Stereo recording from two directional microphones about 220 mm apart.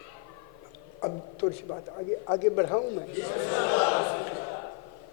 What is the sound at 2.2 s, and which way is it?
Speech, 30° left (ahead or behind).